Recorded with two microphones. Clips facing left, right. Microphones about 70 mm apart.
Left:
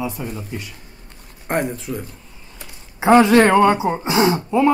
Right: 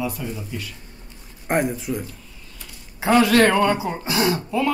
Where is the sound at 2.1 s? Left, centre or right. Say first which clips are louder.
Left 1 dB; left.